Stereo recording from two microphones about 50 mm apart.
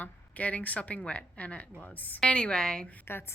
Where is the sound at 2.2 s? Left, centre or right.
Centre.